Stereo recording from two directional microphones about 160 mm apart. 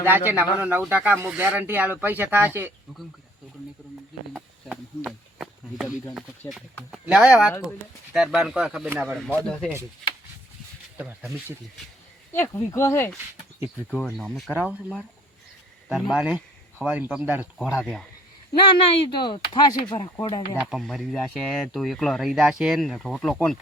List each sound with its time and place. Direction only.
0.0 s speech: 10° right (ahead or behind)
4.4 s a sound: 5° right (ahead or behind)
6.9 s speech: 5° right (ahead or behind)
10.9 s speech: 10° right (ahead or behind)
12.3 s speech: 15° left (ahead or behind)
13.6 s speech: 5° right (ahead or behind)
18.5 s speech: 30° left (ahead or behind)
20.6 s speech: centre (ahead or behind)